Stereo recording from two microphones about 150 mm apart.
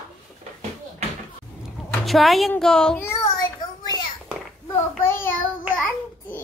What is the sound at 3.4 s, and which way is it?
Child singing, 30° left (ahead or behind).